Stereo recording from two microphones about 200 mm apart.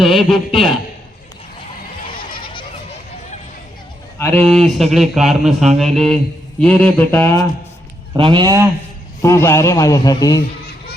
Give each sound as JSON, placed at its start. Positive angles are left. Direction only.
{"t": 0.0, "sound": "speech", "side_deg": 0}
{"t": 2.0, "sound": "a sound", "side_deg": 25}
{"t": 4.4, "sound": "a man's voice", "side_deg": 0}
{"t": 8.1, "sound": "speech", "side_deg": -25}
{"t": 9.2, "sound": "a man's voice", "side_deg": 15}